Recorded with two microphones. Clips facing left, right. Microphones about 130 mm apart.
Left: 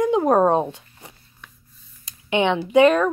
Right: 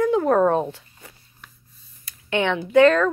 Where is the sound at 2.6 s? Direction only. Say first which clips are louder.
Right 1 dB; 15° left (ahead or behind).